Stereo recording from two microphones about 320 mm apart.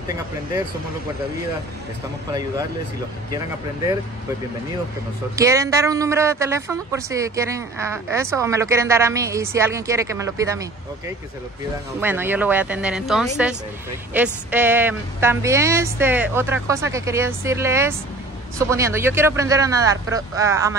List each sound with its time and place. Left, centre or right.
5.3 s speech: centre
12.0 s speech: centre